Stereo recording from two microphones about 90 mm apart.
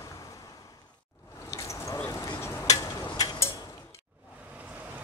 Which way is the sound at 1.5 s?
35° left (ahead or behind).